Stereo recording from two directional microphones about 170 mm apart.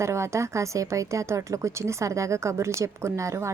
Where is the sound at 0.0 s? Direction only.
15° right (ahead or behind).